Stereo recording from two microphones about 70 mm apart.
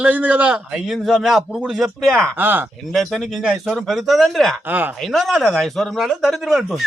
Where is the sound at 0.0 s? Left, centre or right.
Right.